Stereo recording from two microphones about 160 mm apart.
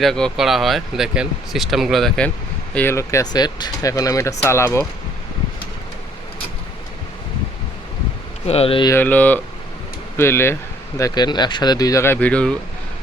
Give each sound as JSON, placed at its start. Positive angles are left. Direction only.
{"t": 0.0, "sound": "speech", "side_deg": 0}
{"t": 2.7, "sound": "speech", "side_deg": 15}
{"t": 8.4, "sound": "speech", "side_deg": 35}
{"t": 8.9, "sound": "speech", "side_deg": 10}